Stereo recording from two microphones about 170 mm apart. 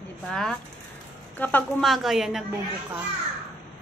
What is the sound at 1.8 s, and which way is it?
Speech, centre (ahead or behind).